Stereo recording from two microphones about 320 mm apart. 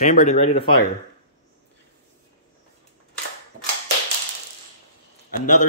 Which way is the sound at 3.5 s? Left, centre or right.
Right.